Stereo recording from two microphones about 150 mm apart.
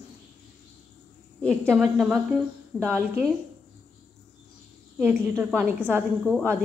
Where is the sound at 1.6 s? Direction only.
15° right (ahead or behind).